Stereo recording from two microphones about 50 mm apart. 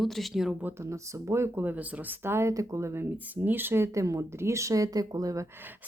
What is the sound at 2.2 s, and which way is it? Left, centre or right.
Speech, right.